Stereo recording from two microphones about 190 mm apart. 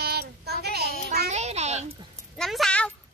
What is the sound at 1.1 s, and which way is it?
Speech, 35° right (ahead or behind).